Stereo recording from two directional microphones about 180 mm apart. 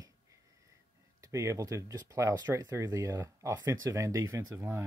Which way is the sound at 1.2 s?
15° right (ahead or behind).